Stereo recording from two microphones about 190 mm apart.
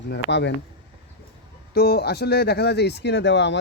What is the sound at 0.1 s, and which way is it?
Speech, 65° left (ahead or behind).